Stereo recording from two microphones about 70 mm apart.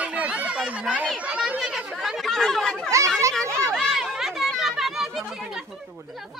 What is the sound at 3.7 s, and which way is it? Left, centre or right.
Chatter, centre.